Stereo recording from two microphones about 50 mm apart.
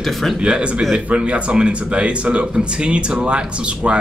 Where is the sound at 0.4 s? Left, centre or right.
Centre.